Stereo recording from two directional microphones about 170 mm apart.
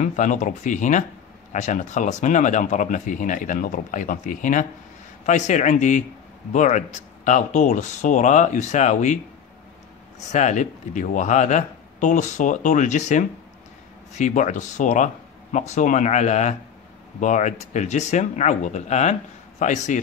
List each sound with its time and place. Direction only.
0.0 s speech: 45° left (ahead or behind)
10.3 s speech: 45° left (ahead or behind)